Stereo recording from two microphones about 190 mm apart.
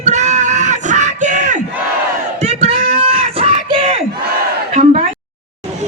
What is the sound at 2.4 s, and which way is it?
Crowd, 35° right (ahead or behind).